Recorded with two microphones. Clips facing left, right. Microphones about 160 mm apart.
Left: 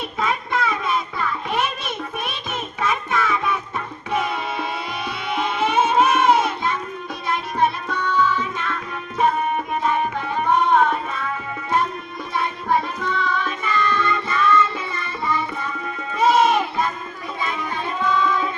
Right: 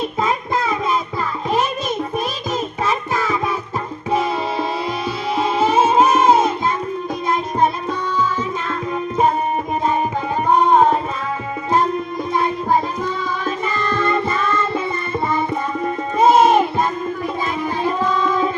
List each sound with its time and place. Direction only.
0.2 s music: 30° right (ahead or behind)
10.6 s music: 40° right (ahead or behind)
12.4 s music: 45° right (ahead or behind)